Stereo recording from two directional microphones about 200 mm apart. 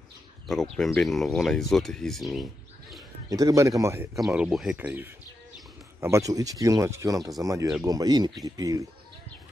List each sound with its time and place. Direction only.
0.7 s speech: centre (ahead or behind)
3.3 s speech: 15° right (ahead or behind)
4.3 s speech: centre (ahead or behind); by 8.8 s 15° right (ahead or behind)